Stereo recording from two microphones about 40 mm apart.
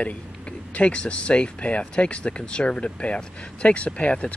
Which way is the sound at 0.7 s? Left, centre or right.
Left.